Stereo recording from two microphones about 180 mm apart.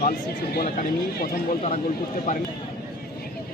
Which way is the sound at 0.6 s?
45° left (ahead or behind).